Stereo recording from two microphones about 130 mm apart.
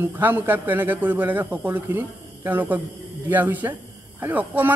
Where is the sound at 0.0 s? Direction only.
15° right (ahead or behind).